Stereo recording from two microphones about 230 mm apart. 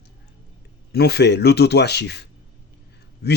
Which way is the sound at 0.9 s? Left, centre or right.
Left.